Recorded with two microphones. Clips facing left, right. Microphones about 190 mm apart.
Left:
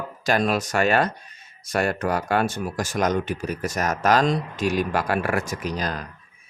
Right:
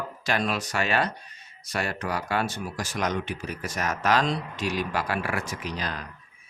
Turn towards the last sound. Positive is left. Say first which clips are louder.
# left 5 dB
turn(degrees=45)  # may be behind; listen again after turning